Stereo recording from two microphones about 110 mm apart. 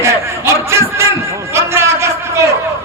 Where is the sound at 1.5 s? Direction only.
25° right (ahead or behind).